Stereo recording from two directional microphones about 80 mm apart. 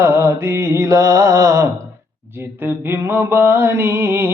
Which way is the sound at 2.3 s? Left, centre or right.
Right.